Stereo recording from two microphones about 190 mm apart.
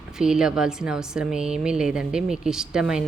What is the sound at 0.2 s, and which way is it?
A woman's voice, 5° right (ahead or behind).